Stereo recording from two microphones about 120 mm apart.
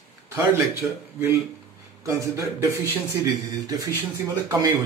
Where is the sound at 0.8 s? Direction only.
20° right (ahead or behind).